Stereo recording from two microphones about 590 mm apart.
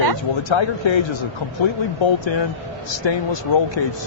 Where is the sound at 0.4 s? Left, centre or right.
Left.